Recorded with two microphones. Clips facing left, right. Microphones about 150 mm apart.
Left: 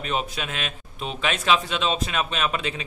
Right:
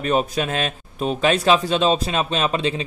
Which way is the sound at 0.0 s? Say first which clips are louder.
Right 8 dB; 45° right (ahead or behind).